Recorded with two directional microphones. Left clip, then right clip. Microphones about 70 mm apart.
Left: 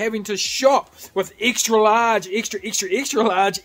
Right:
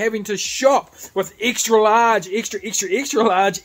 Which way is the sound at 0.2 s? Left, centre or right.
Centre.